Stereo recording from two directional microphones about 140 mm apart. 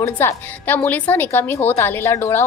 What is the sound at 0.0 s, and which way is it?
A woman's voice, 15° left (ahead or behind).